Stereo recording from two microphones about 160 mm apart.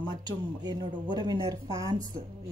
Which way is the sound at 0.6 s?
25° right (ahead or behind).